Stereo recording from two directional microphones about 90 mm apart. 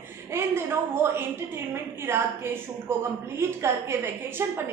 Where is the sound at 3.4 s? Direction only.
30° right (ahead or behind).